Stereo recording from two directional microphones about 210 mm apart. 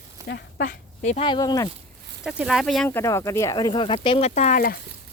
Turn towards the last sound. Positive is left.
turn(degrees=40)  # may be behind; listen again after turning